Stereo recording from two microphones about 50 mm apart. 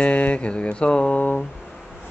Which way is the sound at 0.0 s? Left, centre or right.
Left.